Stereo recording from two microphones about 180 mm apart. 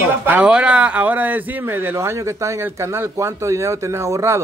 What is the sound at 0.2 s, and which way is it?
Speech, 10° right (ahead or behind).